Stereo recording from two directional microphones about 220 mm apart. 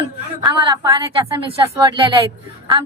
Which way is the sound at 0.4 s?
15° right (ahead or behind).